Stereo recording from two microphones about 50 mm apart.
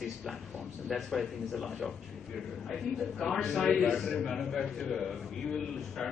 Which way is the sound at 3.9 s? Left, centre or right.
Centre.